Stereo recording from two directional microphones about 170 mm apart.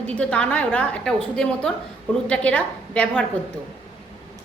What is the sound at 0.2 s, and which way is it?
A woman's voice, 5° left (ahead or behind).